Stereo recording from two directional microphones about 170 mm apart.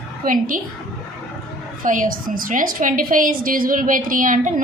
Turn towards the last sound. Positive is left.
turn(degrees=-50)  # may be behind; listen again after turning